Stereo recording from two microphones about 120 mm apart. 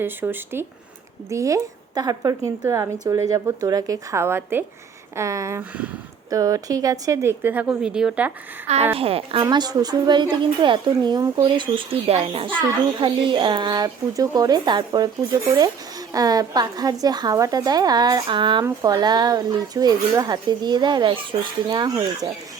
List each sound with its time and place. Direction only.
0.0 s a woman's voice: 15° right (ahead or behind)
8.6 s speech: 65° right (ahead or behind)
9.0 s a child's voice: 55° right (ahead or behind)
9.4 s a woman's voice: 35° right (ahead or behind)